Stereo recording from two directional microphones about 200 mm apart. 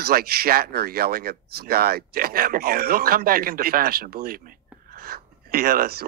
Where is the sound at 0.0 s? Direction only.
50° right (ahead or behind).